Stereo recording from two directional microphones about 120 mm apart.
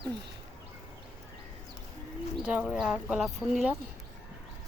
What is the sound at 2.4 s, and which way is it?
Speech, 10° right (ahead or behind).